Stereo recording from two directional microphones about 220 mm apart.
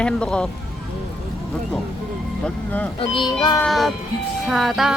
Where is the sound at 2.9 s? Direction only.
25° left (ahead or behind).